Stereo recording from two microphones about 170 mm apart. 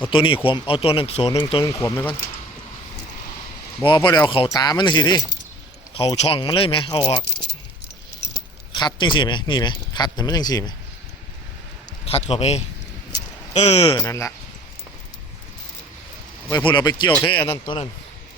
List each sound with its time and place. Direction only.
0.1 s speech: 30° left (ahead or behind)
1.6 s speech: 15° left (ahead or behind)
3.8 s speech: 25° left (ahead or behind)
8.7 s speech: 25° left (ahead or behind)
12.0 s speech: 35° left (ahead or behind)
13.9 s speech: 20° left (ahead or behind)
16.5 s speech: 25° left (ahead or behind)